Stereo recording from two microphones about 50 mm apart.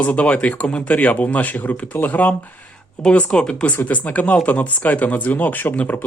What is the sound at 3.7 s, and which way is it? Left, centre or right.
Speech, left.